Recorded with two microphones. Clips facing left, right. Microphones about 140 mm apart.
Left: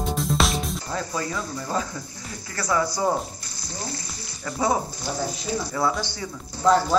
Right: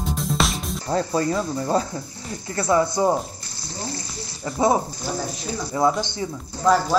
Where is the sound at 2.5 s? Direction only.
25° right (ahead or behind).